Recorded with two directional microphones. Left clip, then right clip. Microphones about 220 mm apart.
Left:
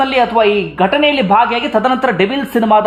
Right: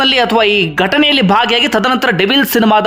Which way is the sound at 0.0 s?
20° right (ahead or behind).